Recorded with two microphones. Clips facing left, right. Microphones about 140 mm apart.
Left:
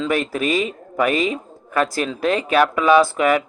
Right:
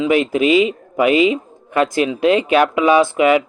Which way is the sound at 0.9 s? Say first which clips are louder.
Right 5 dB; 15° right (ahead or behind).